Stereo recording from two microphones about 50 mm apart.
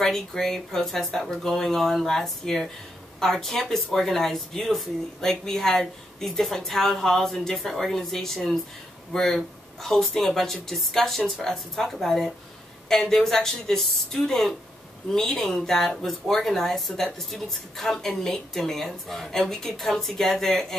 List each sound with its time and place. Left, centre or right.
0.0 s speech: centre